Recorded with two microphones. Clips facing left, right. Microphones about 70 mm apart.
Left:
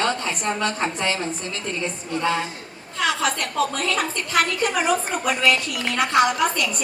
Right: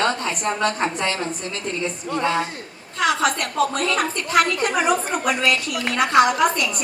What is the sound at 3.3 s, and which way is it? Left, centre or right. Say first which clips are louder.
Speech: right 2 dB; right.